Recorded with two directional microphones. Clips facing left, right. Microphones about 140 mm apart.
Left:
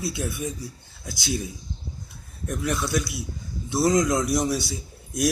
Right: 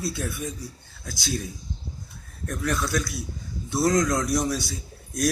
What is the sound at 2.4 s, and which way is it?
Speech, 5° left (ahead or behind).